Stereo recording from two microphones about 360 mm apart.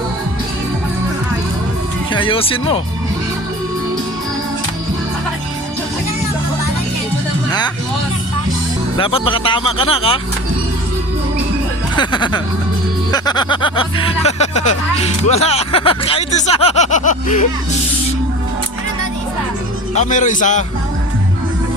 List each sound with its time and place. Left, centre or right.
2.1 s speech: centre
9.0 s speech: centre
11.9 s speech: centre
19.9 s a man's voice: centre